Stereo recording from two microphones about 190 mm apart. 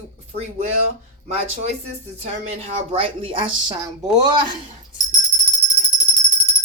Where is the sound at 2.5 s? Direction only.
30° right (ahead or behind).